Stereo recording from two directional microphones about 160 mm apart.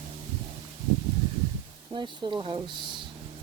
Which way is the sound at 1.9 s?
30° right (ahead or behind).